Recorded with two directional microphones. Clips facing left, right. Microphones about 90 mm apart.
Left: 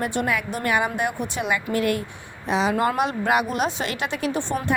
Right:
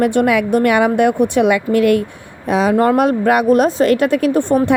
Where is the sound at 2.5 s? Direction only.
50° right (ahead or behind).